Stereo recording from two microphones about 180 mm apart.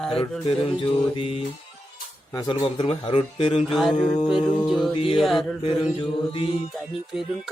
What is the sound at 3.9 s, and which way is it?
Speech, 30° left (ahead or behind).